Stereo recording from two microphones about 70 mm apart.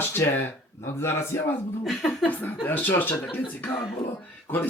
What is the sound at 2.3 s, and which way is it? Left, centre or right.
Speech, left.